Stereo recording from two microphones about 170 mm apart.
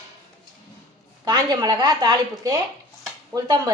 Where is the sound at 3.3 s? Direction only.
25° right (ahead or behind).